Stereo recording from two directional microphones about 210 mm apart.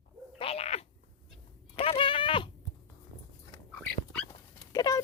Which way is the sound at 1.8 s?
25° left (ahead or behind).